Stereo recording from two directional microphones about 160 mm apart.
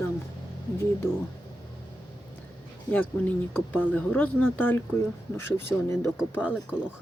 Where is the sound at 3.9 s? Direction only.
10° left (ahead or behind).